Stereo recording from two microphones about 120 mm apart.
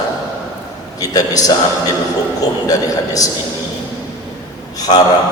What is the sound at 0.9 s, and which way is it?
A man's voice, 30° left (ahead or behind).